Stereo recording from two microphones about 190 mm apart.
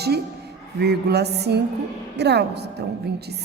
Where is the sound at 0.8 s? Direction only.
60° right (ahead or behind).